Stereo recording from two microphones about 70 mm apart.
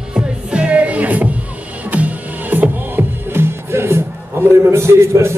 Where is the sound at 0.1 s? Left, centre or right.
Centre.